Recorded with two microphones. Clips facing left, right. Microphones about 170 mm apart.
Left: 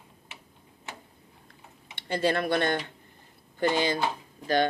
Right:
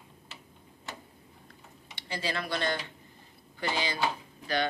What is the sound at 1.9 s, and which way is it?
Speech, 55° left (ahead or behind).